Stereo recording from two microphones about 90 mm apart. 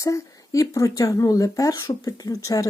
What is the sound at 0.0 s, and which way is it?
Speech, 40° left (ahead or behind).